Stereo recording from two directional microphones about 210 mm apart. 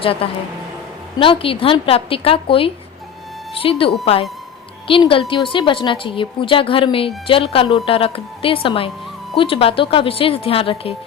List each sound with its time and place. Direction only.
0.0 s a woman's voice: 25° left (ahead or behind)